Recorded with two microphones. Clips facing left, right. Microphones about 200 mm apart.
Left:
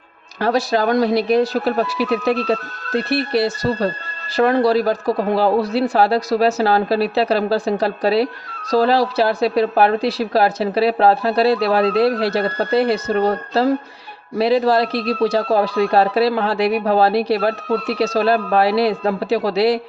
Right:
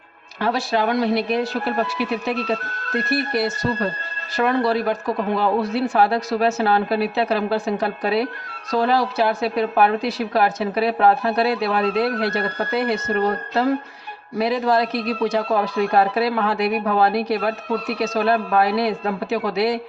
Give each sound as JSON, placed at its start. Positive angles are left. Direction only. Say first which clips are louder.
{"t": 0.4, "sound": "speech", "louder": "left 4 dB", "side_deg": 40}